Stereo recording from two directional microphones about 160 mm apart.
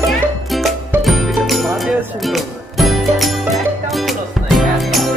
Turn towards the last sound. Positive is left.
turn(degrees=0)  # may be behind; listen again after turning